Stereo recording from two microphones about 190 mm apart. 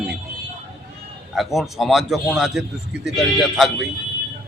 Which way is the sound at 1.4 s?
Centre (ahead or behind).